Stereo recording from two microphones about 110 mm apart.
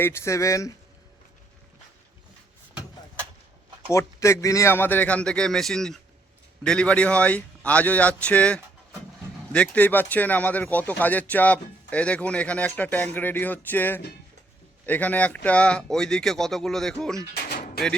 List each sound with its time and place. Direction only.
0.0 s speech: 25° left (ahead or behind)
3.9 s speech: 25° left (ahead or behind); by 17.2 s 5° left (ahead or behind)